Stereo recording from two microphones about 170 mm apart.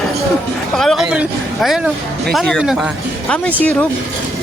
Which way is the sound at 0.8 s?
Centre (ahead or behind).